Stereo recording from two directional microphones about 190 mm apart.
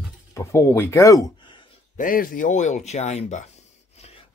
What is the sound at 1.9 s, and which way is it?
Speech, 45° left (ahead or behind).